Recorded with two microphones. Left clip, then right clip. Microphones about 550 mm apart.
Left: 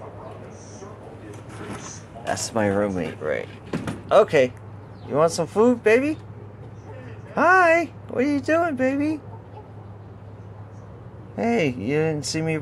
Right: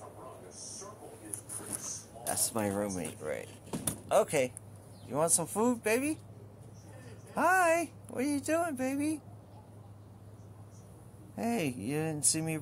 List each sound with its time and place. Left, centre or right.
2.2 s speech: right
7.3 s speech: right
11.3 s speech: right